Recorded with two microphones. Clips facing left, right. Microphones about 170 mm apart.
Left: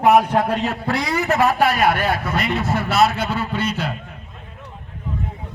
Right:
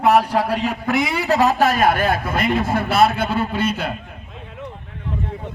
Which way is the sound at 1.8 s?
50° right (ahead or behind).